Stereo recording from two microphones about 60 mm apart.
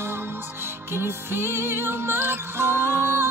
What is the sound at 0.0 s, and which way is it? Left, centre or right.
Music, right.